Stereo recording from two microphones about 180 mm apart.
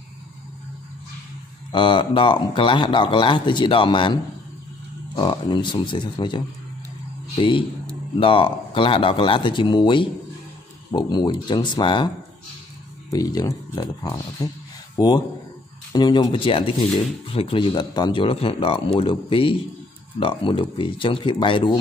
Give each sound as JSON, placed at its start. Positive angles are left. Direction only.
{"t": 1.7, "sound": "speech", "side_deg": 25}
{"t": 13.1, "sound": "speech", "side_deg": 20}